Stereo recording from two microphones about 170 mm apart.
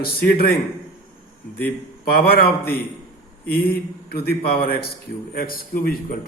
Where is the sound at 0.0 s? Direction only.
65° left (ahead or behind).